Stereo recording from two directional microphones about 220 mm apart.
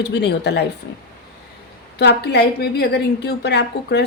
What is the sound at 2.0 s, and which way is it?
A woman's voice, 50° left (ahead or behind).